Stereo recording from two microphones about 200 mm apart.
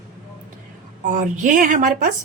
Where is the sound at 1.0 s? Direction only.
40° right (ahead or behind).